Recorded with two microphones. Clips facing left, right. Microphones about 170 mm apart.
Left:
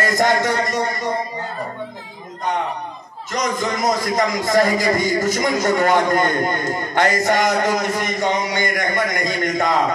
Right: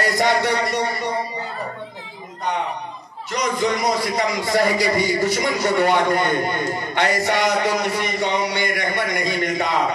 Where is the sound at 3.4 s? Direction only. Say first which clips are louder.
Even; 45° left (ahead or behind).